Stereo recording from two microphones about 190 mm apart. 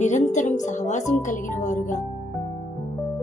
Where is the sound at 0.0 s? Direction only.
40° left (ahead or behind).